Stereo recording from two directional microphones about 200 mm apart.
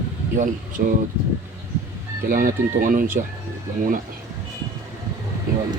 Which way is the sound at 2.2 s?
45° right (ahead or behind).